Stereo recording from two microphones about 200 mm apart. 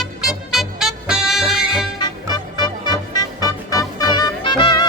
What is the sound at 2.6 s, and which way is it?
Music, 20° left (ahead or behind).